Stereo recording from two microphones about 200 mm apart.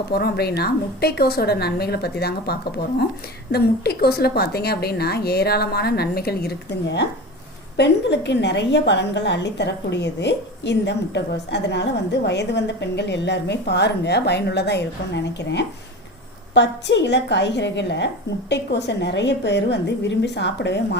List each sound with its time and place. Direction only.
0.1 s a woman's voice: 50° left (ahead or behind)